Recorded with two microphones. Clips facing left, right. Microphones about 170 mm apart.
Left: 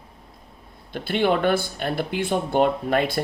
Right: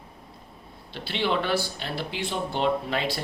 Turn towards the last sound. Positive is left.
turn(degrees=50)  # may be behind; listen again after turning